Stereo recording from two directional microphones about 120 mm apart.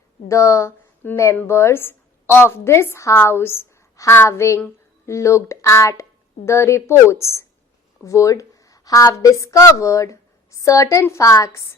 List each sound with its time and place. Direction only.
0.3 s a woman's voice: 25° left (ahead or behind)